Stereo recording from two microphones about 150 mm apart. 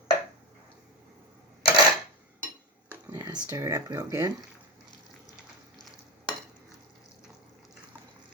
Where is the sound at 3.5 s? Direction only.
20° right (ahead or behind).